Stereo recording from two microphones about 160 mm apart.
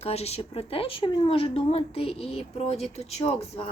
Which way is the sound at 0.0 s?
40° left (ahead or behind).